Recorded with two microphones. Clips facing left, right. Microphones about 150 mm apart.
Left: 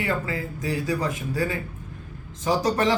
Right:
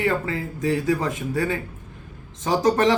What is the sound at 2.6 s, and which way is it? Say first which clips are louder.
Speech: right 6 dB; 25° right (ahead or behind).